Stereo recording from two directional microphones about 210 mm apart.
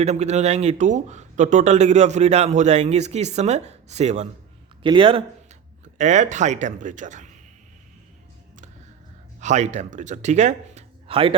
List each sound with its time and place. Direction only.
0.0 s speech: 30° right (ahead or behind)
9.4 s speech: 35° right (ahead or behind)